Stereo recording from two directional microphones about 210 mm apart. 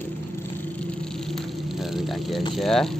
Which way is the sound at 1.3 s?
Centre (ahead or behind).